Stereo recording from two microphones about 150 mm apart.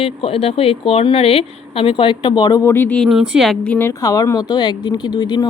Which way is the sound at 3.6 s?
10° left (ahead or behind).